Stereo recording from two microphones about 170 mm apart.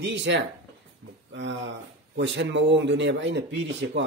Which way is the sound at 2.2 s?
90° right.